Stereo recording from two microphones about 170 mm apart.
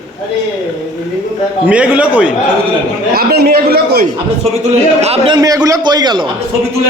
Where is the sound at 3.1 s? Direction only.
65° right (ahead or behind).